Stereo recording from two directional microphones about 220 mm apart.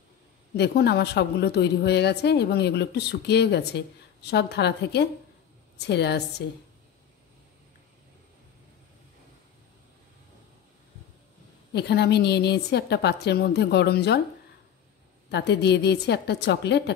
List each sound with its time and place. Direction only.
0.6 s a woman's voice: 50° left (ahead or behind)
11.7 s a woman's voice: 50° left (ahead or behind)
15.3 s a woman's voice: 50° left (ahead or behind)